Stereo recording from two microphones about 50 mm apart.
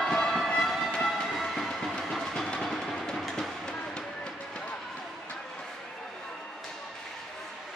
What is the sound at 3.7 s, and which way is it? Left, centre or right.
Run, centre.